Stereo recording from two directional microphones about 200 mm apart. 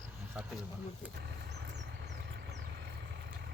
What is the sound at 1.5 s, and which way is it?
Vehicle, 60° right (ahead or behind).